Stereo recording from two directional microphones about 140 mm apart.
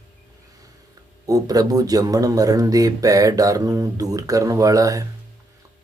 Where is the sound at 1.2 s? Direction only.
25° right (ahead or behind).